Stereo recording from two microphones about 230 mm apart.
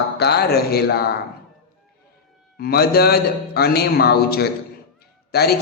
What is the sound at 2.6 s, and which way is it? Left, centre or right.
Speech, left.